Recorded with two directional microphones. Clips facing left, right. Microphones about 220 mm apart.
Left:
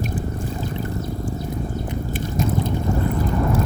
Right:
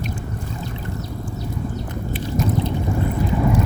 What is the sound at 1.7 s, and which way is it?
Boat, 50° left (ahead or behind).